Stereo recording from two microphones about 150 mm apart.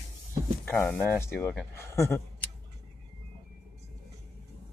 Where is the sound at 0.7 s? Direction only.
10° left (ahead or behind).